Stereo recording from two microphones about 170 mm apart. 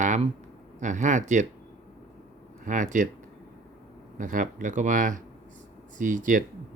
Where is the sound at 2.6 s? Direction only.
50° right (ahead or behind).